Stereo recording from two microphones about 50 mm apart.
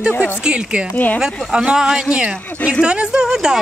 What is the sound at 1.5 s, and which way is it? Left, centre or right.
Speech, centre.